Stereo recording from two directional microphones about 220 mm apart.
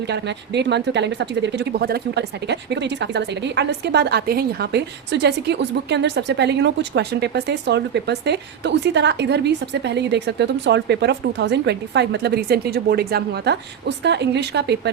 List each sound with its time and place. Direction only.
0.1 s a woman's voice: 50° right (ahead or behind)